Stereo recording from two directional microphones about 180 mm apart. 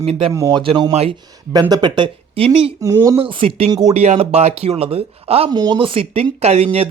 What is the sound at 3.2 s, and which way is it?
Speech, 30° right (ahead or behind).